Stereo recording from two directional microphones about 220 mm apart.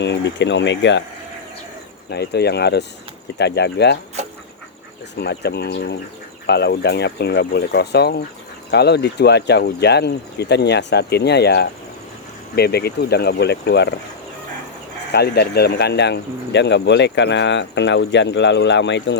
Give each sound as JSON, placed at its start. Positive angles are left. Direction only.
{"t": 0.0, "sound": "speech", "side_deg": 55}
{"t": 2.0, "sound": "speech", "side_deg": 50}
{"t": 5.1, "sound": "speech", "side_deg": 50}
{"t": 15.1, "sound": "speech", "side_deg": 45}